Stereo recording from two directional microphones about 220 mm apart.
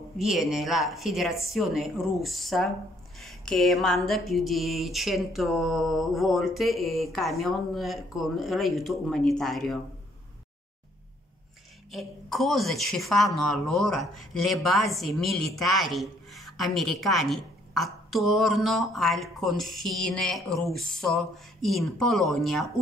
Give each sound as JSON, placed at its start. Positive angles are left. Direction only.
{"t": 0.2, "sound": "a woman's voice", "side_deg": 0}
{"t": 11.9, "sound": "a woman's voice", "side_deg": 0}